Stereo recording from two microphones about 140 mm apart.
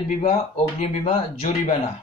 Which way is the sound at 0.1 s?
55° left (ahead or behind).